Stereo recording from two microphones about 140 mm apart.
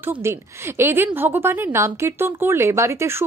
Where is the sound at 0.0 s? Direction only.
15° right (ahead or behind).